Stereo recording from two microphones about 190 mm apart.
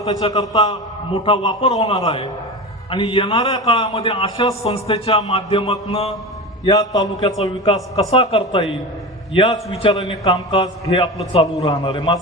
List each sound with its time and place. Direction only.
0.0 s a man's voice: 30° left (ahead or behind)